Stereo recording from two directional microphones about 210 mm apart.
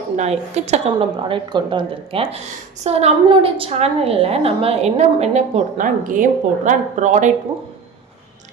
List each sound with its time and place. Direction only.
0.2 s a woman's voice: 30° right (ahead or behind)